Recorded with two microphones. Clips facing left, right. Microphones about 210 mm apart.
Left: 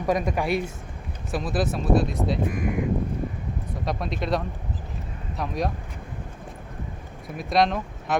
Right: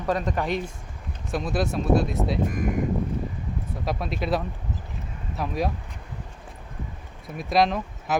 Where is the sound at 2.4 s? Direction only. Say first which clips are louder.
Even; 45° right (ahead or behind).